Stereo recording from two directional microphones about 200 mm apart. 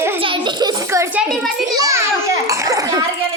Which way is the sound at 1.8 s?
15° right (ahead or behind).